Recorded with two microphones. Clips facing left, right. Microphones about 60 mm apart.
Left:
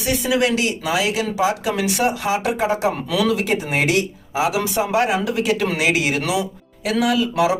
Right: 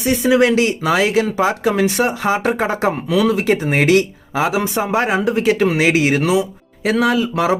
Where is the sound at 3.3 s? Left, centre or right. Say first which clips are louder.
Right 4 dB; right.